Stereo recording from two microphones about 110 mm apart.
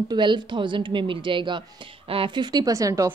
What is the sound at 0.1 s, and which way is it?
A woman's voice, 45° right (ahead or behind).